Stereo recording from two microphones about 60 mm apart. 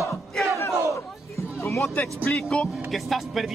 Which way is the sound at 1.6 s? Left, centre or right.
Left.